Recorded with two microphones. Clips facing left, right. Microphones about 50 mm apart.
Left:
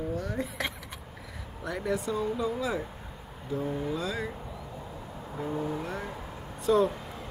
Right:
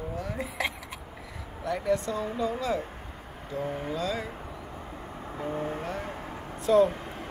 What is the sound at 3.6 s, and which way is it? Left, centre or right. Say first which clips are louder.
Vehicle: even; right.